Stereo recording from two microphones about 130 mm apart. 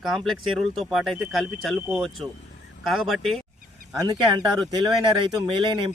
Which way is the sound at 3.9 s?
30° right (ahead or behind).